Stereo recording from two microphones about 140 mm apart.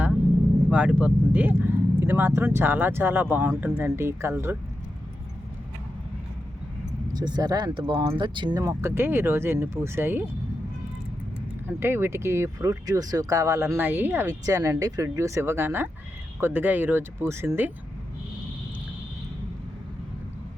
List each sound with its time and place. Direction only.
0.7 s speech: 10° right (ahead or behind)
7.1 s speech: 30° right (ahead or behind)
11.8 s speech: 15° right (ahead or behind)